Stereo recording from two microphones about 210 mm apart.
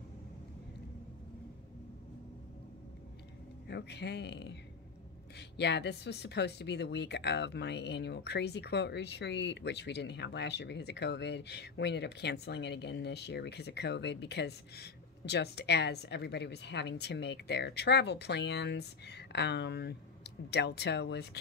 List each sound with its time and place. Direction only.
3.6 s speech: 55° left (ahead or behind)
5.6 s speech: 55° left (ahead or behind)